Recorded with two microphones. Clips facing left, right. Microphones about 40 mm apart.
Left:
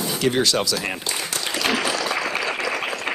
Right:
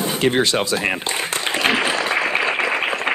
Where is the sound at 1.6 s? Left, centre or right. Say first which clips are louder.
Right 3 dB; right.